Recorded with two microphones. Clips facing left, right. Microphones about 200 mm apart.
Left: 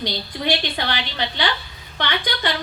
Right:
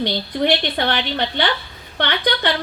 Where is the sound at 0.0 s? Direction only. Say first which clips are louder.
Right 6 dB; 55° right (ahead or behind).